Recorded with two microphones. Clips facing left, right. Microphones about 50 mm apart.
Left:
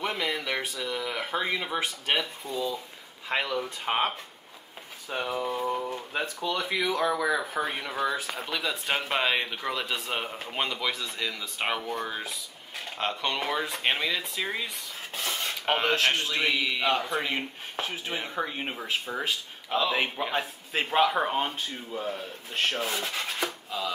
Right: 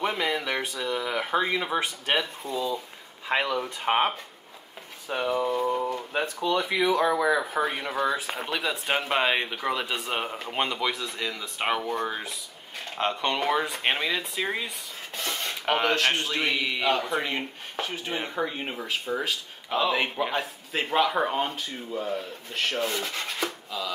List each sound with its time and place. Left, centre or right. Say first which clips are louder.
0.0 s a sound: right 3 dB; centre
1.8 s speech: right 2 dB; centre
3.8 s speech: right 4 dB; centre
5.0 s speech: right 4 dB; centre
5.9 s speech: right 3 dB; centre
13.1 s speech: right 4 dB; centre
15.1 s speech: even; centre
22.8 s rub: right 2 dB; centre